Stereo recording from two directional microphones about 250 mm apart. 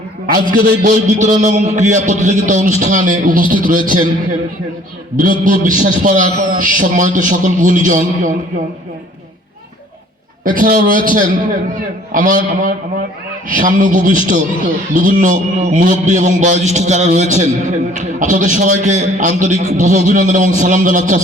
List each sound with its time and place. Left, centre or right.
0.8 s a man's voice: right
5.1 s a man's voice: right
10.4 s a man's voice: right